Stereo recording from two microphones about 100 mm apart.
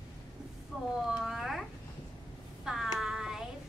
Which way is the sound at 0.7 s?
5° right (ahead or behind).